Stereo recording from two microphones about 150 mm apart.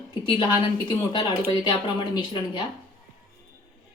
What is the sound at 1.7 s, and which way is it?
Speech, 30° left (ahead or behind).